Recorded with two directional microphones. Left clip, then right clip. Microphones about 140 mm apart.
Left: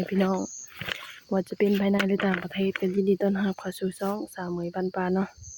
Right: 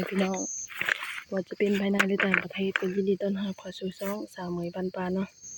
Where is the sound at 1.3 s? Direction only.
30° left (ahead or behind).